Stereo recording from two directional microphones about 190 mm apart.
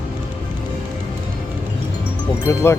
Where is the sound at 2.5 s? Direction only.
10° left (ahead or behind).